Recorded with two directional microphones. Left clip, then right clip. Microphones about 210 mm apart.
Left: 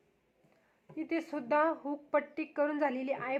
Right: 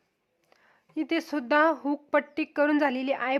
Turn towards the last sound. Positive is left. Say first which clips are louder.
# right 7 dB
turn(degrees=-35)  # may be behind; listen again after turning